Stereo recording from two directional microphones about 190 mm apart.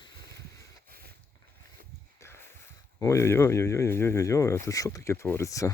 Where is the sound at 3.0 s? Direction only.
15° left (ahead or behind).